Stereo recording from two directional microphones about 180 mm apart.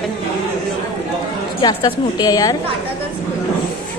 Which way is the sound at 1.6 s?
25° left (ahead or behind).